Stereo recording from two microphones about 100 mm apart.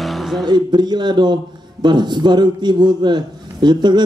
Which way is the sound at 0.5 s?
45° right (ahead or behind).